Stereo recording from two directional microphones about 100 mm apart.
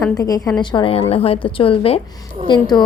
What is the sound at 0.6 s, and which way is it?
Speech, 50° left (ahead or behind).